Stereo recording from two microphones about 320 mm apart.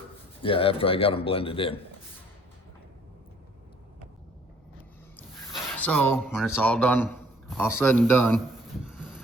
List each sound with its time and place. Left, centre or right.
0.4 s a man's voice: centre
5.5 s a man's voice: centre
9.0 s a sound: centre